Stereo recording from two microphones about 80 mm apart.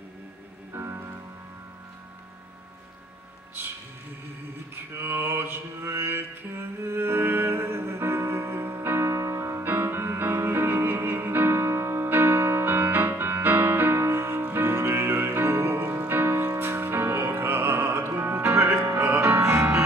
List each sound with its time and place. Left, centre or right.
0.7 s music: right
3.6 s a sound: right
4.7 s mantra: right
14.5 s music: right